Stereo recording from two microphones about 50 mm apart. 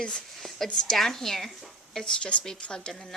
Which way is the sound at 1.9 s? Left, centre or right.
Centre.